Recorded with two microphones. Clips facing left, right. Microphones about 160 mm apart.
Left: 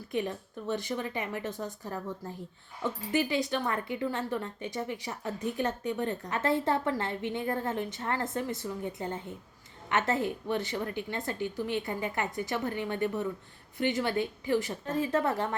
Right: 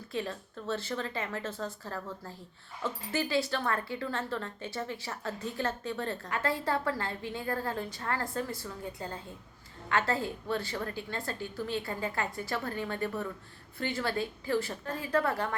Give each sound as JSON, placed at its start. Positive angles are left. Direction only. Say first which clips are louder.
{"t": 0.1, "sound": "speech", "louder": "left 3 dB", "side_deg": 15}